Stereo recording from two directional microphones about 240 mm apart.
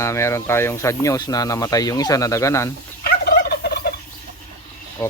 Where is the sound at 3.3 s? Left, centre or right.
Left.